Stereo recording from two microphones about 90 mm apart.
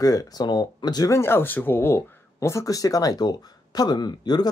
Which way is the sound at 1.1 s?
25° left (ahead or behind).